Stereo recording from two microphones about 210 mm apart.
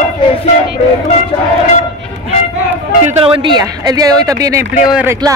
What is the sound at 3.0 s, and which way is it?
Speech, 25° right (ahead or behind).